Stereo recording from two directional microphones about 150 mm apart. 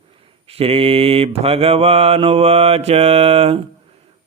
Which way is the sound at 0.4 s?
40° right (ahead or behind).